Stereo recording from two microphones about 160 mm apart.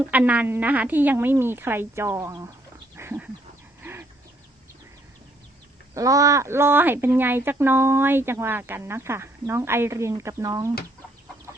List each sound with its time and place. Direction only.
0.0 s speech: 10° right (ahead or behind)
2.9 s dog: 15° right (ahead or behind)
5.9 s speech: 20° right (ahead or behind)